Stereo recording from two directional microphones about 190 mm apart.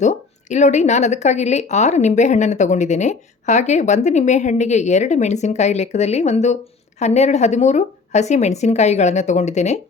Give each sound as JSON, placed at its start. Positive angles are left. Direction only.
{"t": 0.0, "sound": "a woman's voice", "side_deg": 40}